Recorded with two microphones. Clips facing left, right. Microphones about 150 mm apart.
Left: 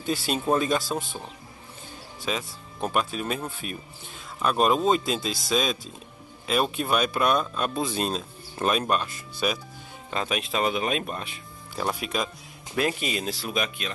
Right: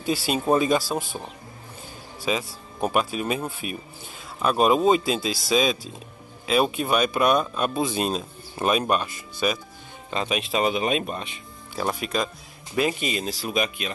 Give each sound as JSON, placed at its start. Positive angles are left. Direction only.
{"t": 0.0, "sound": "speech", "side_deg": -5}
{"t": 2.2, "sound": "speech", "side_deg": -5}